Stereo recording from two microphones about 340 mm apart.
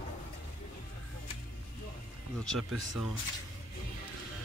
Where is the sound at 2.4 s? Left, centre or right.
Centre.